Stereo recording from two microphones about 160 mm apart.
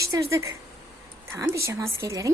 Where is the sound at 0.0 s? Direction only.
20° right (ahead or behind).